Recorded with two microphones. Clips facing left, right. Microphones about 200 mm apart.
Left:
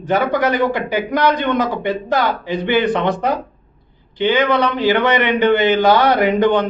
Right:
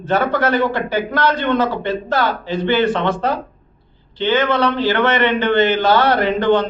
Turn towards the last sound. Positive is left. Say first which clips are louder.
# left 1 dB
turn(degrees=15)  # may be behind; listen again after turning